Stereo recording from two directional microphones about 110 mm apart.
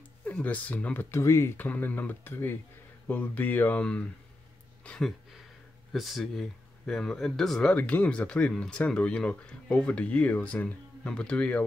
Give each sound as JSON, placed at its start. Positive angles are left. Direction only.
{"t": 0.2, "sound": "speech", "side_deg": 15}
{"t": 1.7, "sound": "speech", "side_deg": 15}